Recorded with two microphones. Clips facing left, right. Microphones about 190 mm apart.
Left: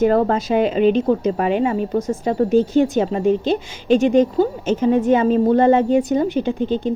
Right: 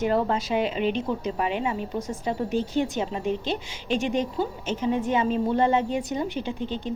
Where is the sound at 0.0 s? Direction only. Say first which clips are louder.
Left 8 dB; 45° left (ahead or behind).